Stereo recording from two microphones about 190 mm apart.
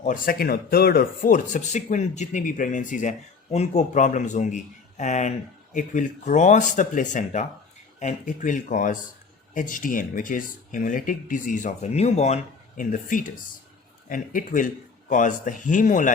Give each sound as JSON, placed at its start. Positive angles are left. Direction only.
{"t": 0.0, "sound": "speech", "side_deg": 50}